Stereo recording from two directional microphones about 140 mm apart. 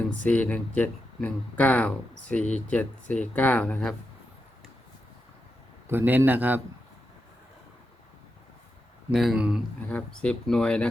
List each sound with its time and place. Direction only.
0.2 s speech: 10° left (ahead or behind)
5.9 s a man's voice: 15° right (ahead or behind)
9.1 s speech: 5° right (ahead or behind)
9.9 s speech: 5° left (ahead or behind)